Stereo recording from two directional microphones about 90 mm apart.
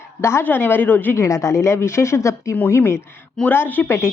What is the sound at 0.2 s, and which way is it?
Speech, 30° left (ahead or behind).